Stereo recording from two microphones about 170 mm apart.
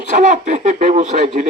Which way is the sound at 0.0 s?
45° right (ahead or behind).